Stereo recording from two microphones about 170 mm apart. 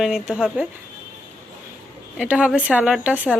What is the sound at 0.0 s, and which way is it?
Speech, 5° right (ahead or behind).